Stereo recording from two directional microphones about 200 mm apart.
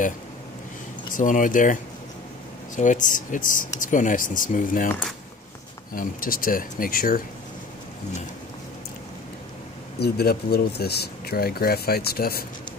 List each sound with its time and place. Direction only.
1.1 s speech: 40° left (ahead or behind)
5.9 s speech: 45° left (ahead or behind)
9.9 s speech: 55° left (ahead or behind)